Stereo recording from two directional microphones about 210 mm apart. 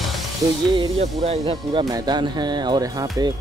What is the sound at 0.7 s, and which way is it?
Speech, 30° right (ahead or behind).